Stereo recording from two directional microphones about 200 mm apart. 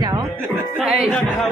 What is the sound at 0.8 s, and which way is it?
Speech, centre (ahead or behind).